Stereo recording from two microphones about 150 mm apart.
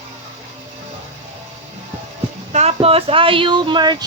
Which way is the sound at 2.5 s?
45° right (ahead or behind).